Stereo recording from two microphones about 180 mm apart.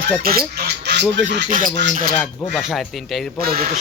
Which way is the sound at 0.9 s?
75° right (ahead or behind).